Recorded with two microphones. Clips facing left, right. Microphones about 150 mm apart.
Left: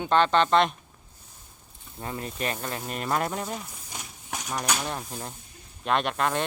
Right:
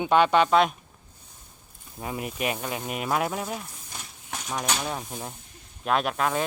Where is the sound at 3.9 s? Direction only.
10° left (ahead or behind).